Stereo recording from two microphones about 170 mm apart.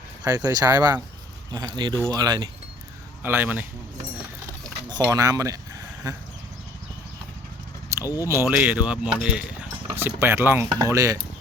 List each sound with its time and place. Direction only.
0.3 s speech: 20° right (ahead or behind)
3.2 s speech: 10° right (ahead or behind)
4.9 s speech: 20° right (ahead or behind)
7.9 s a sound: 15° right (ahead or behind)
8.3 s speech: 15° right (ahead or behind)